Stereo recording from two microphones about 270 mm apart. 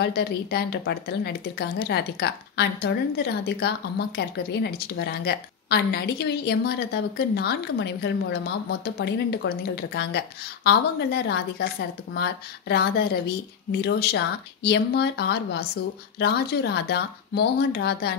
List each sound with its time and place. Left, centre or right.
0.0 s a woman's voice: left